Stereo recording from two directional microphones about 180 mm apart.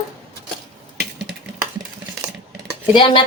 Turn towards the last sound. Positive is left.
turn(degrees=30)  # may be behind; listen again after turning